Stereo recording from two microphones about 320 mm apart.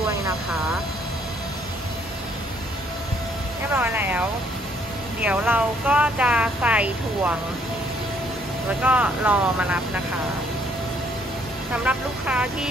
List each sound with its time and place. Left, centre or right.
3.7 s speech: centre
8.8 s speech: centre
11.8 s speech: centre